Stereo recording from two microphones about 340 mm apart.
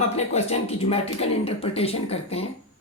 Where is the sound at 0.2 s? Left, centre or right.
Centre.